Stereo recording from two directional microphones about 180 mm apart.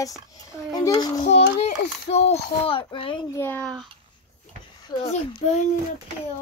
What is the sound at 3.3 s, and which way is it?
Speech, 10° left (ahead or behind).